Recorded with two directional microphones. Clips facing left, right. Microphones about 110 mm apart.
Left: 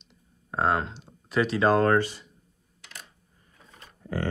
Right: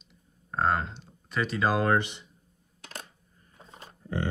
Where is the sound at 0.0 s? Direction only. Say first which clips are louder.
Left 1 dB; centre (ahead or behind).